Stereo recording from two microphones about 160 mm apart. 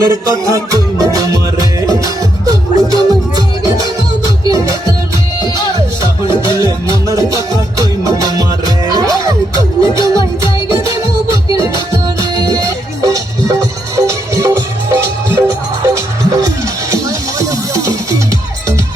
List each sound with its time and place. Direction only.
0.0 s music: 20° right (ahead or behind)
4.4 s music: 20° right (ahead or behind)
6.0 s music: 30° left (ahead or behind)
7.1 s music: 20° right (ahead or behind)